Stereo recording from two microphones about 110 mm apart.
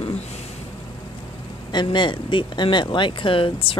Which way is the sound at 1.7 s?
45° left (ahead or behind).